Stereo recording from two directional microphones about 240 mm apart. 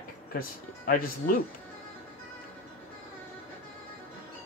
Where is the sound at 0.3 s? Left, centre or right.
Left.